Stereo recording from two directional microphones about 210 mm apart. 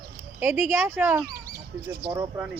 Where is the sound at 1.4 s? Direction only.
45° right (ahead or behind).